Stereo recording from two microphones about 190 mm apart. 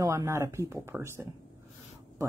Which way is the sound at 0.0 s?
15° right (ahead or behind).